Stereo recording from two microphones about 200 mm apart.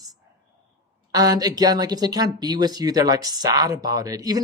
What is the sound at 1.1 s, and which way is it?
Speech, 20° right (ahead or behind).